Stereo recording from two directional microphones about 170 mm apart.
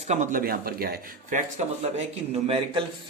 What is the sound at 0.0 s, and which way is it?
Speech, 45° right (ahead or behind).